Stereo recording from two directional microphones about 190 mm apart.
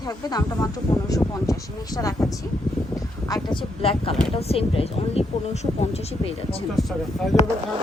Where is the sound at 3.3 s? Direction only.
20° left (ahead or behind).